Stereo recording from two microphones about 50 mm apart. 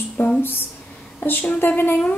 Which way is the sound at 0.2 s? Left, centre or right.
Left.